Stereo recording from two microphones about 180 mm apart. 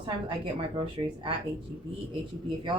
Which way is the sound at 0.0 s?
30° right (ahead or behind).